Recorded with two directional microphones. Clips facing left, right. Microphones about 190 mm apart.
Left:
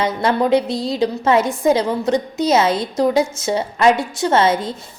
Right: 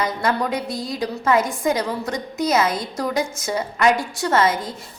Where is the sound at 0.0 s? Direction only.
25° left (ahead or behind).